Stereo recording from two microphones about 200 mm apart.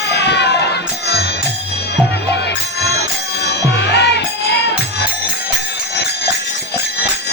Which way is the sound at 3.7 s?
60° left (ahead or behind).